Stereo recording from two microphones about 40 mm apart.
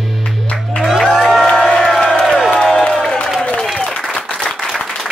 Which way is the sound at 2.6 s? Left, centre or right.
Centre.